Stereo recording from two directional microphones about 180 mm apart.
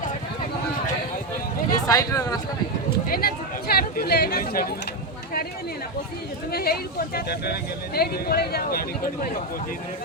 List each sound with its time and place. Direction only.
1.7 s speech: 20° left (ahead or behind)
3.1 s speech: 55° left (ahead or behind)
6.5 s speech: 60° left (ahead or behind)